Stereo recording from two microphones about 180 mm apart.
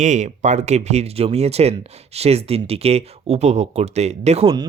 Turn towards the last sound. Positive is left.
turn(degrees=-30)  # may be behind; listen again after turning